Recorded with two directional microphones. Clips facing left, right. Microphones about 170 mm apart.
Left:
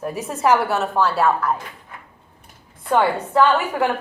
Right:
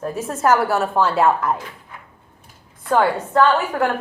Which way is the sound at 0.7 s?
10° right (ahead or behind).